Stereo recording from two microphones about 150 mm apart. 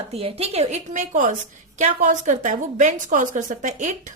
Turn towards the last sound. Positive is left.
turn(degrees=-55)  # may be behind; listen again after turning